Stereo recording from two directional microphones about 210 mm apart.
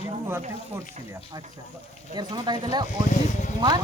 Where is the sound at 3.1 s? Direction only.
35° left (ahead or behind).